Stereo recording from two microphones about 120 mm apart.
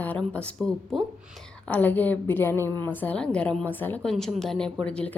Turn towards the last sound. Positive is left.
turn(degrees=10)  # may be behind; listen again after turning